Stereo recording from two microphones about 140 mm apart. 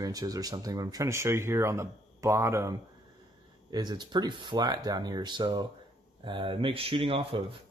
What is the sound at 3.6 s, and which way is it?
Speech, 30° right (ahead or behind).